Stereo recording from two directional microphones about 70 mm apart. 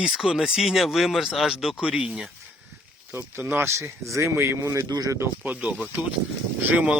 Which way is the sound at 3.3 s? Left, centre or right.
Right.